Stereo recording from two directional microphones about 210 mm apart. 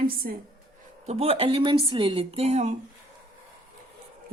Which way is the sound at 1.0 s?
30° right (ahead or behind).